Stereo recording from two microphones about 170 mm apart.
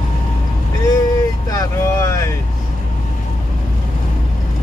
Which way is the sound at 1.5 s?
15° left (ahead or behind).